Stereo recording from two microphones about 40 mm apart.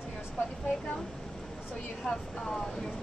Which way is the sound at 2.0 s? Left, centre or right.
Centre.